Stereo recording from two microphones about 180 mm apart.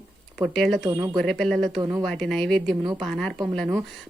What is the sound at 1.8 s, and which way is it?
Speech, 20° right (ahead or behind).